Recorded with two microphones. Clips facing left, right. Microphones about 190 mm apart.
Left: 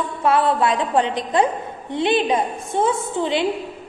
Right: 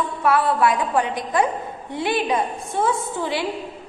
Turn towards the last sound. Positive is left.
turn(degrees=20)  # may be behind; listen again after turning